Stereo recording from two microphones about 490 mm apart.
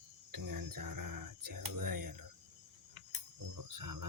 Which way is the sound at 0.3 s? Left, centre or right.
Right.